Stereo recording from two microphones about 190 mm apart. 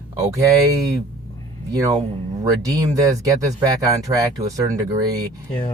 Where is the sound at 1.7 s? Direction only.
20° right (ahead or behind).